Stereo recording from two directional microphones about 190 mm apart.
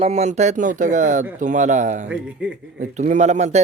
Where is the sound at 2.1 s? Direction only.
5° right (ahead or behind).